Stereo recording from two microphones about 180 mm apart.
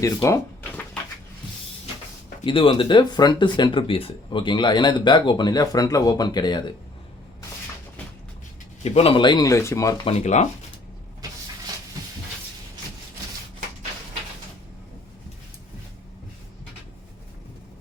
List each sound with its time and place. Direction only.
0.0 s speech: 15° left (ahead or behind)
2.4 s speech: 30° left (ahead or behind)
8.8 s speech: 35° left (ahead or behind); by 9.9 s 15° left (ahead or behind)
10.0 s speech: 35° left (ahead or behind)